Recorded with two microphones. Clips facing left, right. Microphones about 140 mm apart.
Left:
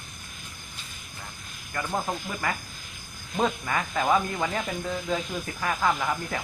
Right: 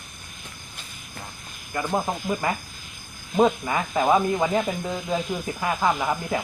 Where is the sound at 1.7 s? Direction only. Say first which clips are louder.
Right 4 dB; 25° right (ahead or behind).